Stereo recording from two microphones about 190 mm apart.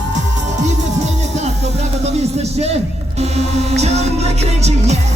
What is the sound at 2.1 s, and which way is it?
Music, 35° right (ahead or behind).